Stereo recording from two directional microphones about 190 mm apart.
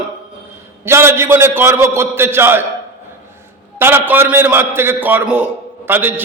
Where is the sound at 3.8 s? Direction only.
10° right (ahead or behind).